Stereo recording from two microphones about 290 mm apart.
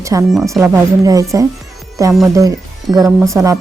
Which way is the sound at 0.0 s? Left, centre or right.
Centre.